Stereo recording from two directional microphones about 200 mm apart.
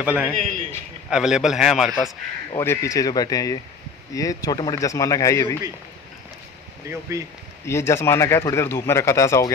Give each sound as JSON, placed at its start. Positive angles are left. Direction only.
{"t": 0.0, "sound": "a man's voice", "side_deg": -5}
{"t": 2.5, "sound": "speech", "side_deg": 15}
{"t": 6.9, "sound": "speech", "side_deg": -15}
{"t": 7.6, "sound": "speech", "side_deg": 15}